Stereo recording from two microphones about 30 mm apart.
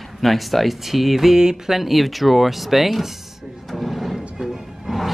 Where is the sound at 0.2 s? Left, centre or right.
Centre.